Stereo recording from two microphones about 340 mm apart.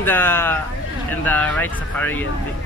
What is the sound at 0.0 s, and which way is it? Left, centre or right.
Speech, centre.